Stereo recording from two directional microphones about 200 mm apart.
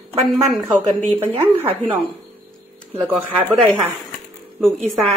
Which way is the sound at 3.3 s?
5° left (ahead or behind).